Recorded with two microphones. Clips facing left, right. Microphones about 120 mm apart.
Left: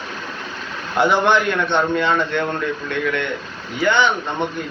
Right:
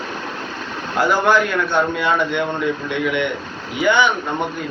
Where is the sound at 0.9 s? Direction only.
Centre (ahead or behind).